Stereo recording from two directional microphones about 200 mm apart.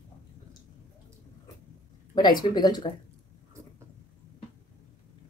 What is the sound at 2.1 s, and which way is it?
Speech, 20° left (ahead or behind).